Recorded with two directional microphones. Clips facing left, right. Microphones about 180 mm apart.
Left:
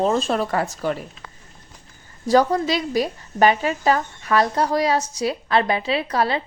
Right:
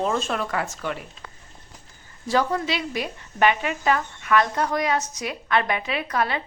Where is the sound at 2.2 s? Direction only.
40° left (ahead or behind).